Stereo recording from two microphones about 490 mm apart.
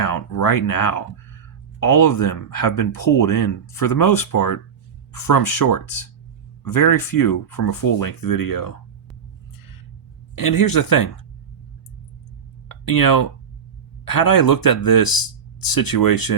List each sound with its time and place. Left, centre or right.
0.1 s speech: left
2.0 s speech: left
10.3 s speech: left
12.6 s a sound: left
14.1 s speech: left